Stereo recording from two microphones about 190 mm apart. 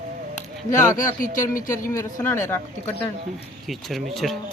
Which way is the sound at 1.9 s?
15° left (ahead or behind).